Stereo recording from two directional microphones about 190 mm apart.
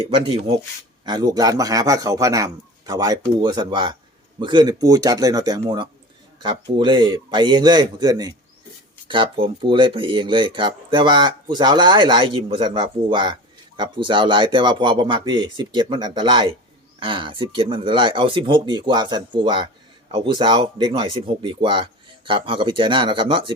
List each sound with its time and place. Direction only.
0.1 s speech: 30° right (ahead or behind)